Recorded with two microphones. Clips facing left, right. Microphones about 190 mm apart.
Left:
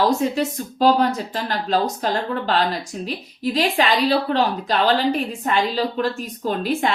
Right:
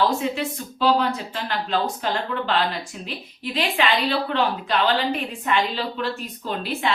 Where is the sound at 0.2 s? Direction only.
45° left (ahead or behind).